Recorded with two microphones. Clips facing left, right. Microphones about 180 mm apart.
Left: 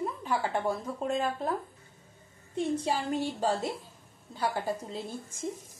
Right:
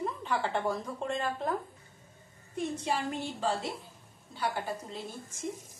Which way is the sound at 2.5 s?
35° left (ahead or behind).